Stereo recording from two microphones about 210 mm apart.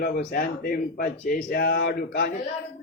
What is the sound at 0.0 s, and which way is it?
A man's voice, 40° left (ahead or behind).